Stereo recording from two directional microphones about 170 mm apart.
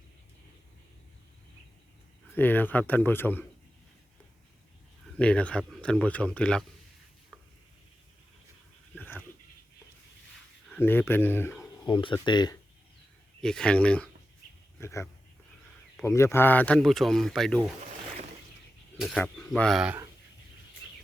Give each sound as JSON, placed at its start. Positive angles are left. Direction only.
{"t": 2.3, "sound": "speech", "side_deg": 10}
{"t": 5.1, "sound": "speech", "side_deg": 5}
{"t": 9.0, "sound": "a sound", "side_deg": 10}
{"t": 10.7, "sound": "speech", "side_deg": 10}
{"t": 11.9, "sound": "speech", "side_deg": 30}
{"t": 13.4, "sound": "speech", "side_deg": 5}
{"t": 18.9, "sound": "speech", "side_deg": 0}